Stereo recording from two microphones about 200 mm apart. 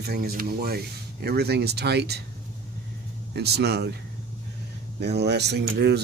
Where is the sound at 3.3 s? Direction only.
55° right (ahead or behind).